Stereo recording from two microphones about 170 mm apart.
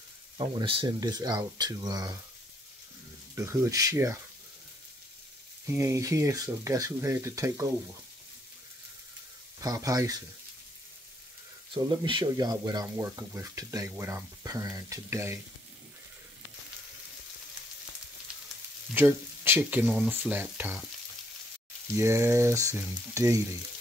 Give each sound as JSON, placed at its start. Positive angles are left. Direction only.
{"t": 0.4, "sound": "speech", "side_deg": -30}
{"t": 3.3, "sound": "speech", "side_deg": -15}
{"t": 5.7, "sound": "speech", "side_deg": -20}
{"t": 9.6, "sound": "speech", "side_deg": -20}
{"t": 11.7, "sound": "speech", "side_deg": -30}
{"t": 18.9, "sound": "speech", "side_deg": -15}
{"t": 21.9, "sound": "speech", "side_deg": -15}